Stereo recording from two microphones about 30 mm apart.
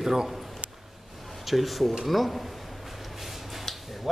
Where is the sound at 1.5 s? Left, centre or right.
Centre.